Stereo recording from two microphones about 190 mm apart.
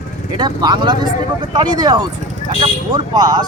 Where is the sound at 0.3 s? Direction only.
20° right (ahead or behind).